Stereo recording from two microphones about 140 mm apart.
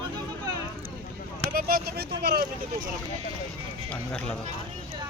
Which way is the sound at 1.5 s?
90° right.